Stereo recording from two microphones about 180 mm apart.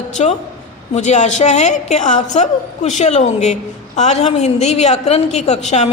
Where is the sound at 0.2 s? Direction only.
40° left (ahead or behind).